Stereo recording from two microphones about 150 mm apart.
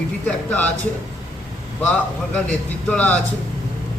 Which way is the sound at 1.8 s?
10° left (ahead or behind).